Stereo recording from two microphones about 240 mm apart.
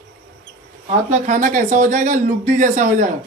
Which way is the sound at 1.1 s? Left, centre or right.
Right.